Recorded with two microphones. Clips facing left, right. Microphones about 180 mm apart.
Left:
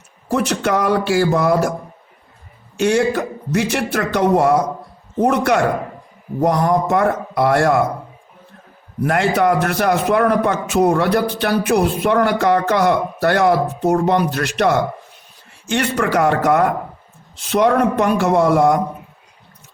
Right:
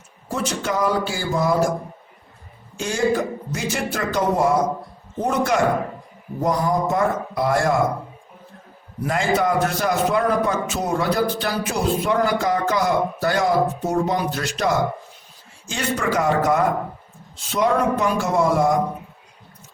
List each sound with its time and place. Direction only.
0.3 s a man's voice: 70° left (ahead or behind)
2.7 s a man's voice: 70° left (ahead or behind)
9.0 s a man's voice: 65° left (ahead or behind)